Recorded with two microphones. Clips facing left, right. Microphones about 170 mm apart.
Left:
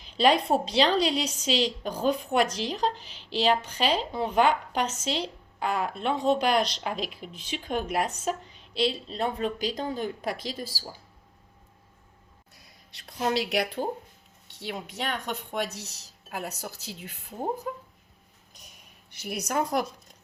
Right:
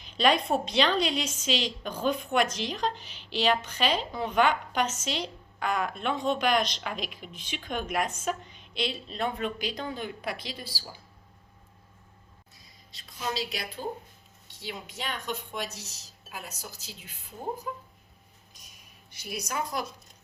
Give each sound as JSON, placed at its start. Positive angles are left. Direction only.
{"t": 0.0, "sound": "a woman's voice", "side_deg": 30}
{"t": 12.5, "sound": "speech", "side_deg": 65}
{"t": 19.1, "sound": "speech", "side_deg": 60}